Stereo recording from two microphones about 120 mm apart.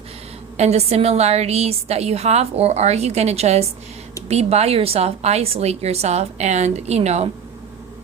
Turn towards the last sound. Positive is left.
turn(degrees=-65)  # may be behind; listen again after turning